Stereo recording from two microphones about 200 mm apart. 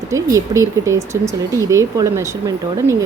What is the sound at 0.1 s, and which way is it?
A woman's voice, 15° right (ahead or behind).